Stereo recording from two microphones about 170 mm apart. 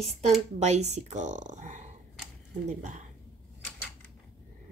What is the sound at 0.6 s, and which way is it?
A woman's voice, 40° right (ahead or behind).